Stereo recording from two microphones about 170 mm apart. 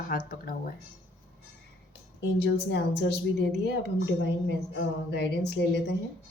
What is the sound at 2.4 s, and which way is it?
Speech, 90° left.